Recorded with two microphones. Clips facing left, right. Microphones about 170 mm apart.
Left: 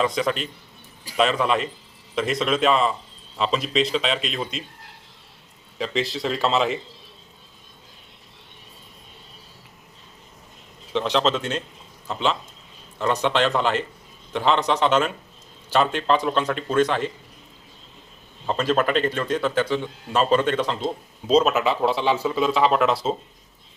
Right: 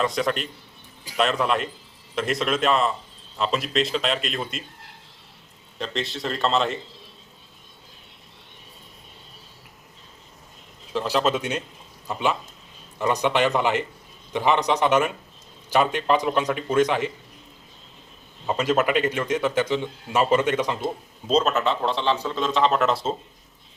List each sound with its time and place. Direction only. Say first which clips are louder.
0.0 s a man's voice: left 1 dB; centre (ahead or behind)
5.7 s a man's voice: left 4 dB; centre (ahead or behind)
10.9 s speech: left 1 dB; 5° right (ahead or behind)
18.4 s speech: even; 15° right (ahead or behind)
21.2 s a man's voice: left 3 dB; 5° left (ahead or behind)